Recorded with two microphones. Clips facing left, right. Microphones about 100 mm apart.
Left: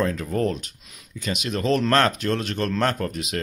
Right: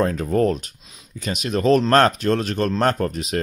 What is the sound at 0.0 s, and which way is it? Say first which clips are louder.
Speech: right 4 dB; 35° right (ahead or behind).